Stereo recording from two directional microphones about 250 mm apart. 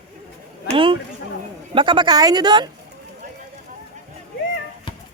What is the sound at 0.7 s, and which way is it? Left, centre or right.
A woman's voice, right.